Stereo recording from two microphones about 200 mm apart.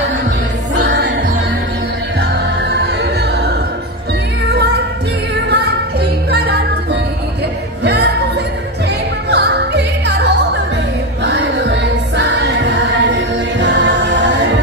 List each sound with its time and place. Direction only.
0.7 s music: 60° right (ahead or behind)
2.7 s music: 55° right (ahead or behind)
5.5 s music: 55° right (ahead or behind)
7.8 s music: 55° right (ahead or behind)
9.3 s opera: 60° right (ahead or behind)
11.2 s music: 60° right (ahead or behind)